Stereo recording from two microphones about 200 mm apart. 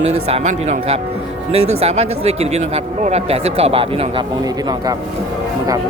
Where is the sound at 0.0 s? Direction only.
30° right (ahead or behind).